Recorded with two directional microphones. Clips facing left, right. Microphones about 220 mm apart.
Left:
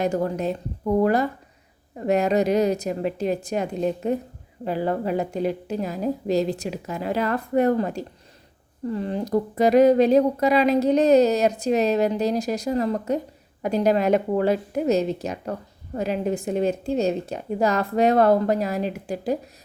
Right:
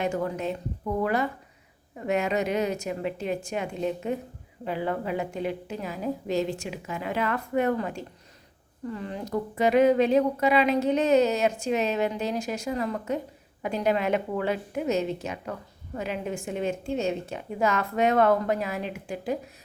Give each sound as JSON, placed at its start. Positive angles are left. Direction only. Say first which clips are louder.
{"t": 0.0, "sound": "speech", "louder": "left 4 dB", "side_deg": 35}